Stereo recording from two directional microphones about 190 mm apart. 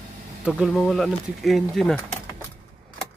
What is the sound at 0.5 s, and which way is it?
Speech, centre (ahead or behind).